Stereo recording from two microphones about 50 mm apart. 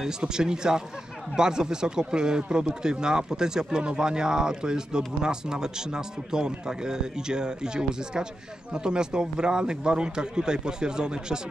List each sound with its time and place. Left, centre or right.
0.0 s speech: centre